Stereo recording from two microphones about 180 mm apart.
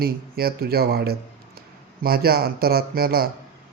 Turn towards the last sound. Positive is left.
turn(degrees=-55)  # may be behind; listen again after turning